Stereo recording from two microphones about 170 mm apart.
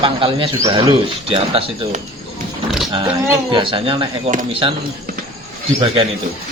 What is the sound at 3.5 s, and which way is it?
Speech, 30° right (ahead or behind).